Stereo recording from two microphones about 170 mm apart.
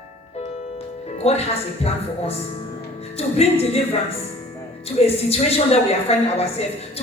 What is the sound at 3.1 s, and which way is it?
Speech, 35° left (ahead or behind).